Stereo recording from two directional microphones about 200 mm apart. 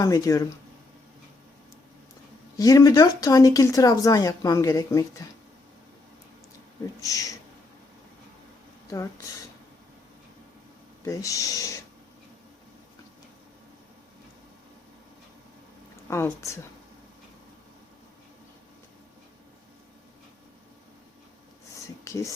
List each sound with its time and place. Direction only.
0.0 s speech: 15° left (ahead or behind)
2.6 s speech: 15° left (ahead or behind)
7.0 s speech: 15° left (ahead or behind)
11.0 s speech: 15° left (ahead or behind)
16.0 s speech: 15° left (ahead or behind)
22.0 s a sound: 15° left (ahead or behind)